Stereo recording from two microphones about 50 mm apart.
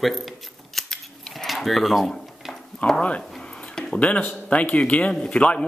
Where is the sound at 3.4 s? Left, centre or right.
Centre.